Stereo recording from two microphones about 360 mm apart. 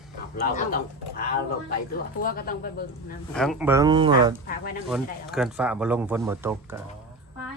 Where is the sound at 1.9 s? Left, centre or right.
Left.